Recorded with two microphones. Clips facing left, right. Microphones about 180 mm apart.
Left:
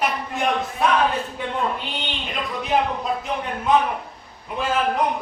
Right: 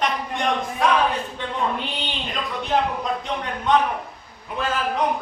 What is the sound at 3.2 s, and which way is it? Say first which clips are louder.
A man's voice: left 1 dB; 5° left (ahead or behind).